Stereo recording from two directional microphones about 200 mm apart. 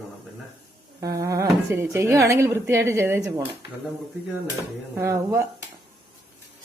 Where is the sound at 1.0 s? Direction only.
15° right (ahead or behind).